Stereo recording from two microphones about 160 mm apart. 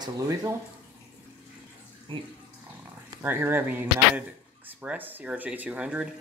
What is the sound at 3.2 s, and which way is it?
Speech, 15° right (ahead or behind).